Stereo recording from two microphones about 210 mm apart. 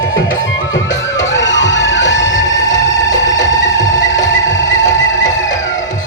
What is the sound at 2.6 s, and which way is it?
Music, 15° left (ahead or behind).